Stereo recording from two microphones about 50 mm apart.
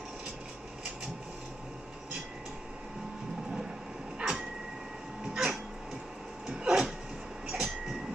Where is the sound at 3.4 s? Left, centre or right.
Centre.